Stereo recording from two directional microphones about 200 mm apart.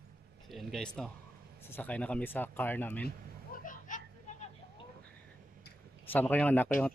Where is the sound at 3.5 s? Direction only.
40° left (ahead or behind).